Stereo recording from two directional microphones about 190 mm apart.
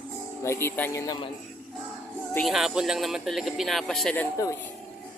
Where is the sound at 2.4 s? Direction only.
Centre (ahead or behind).